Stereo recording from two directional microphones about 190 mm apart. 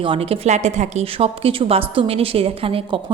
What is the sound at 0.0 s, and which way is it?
A woman's voice, 30° right (ahead or behind).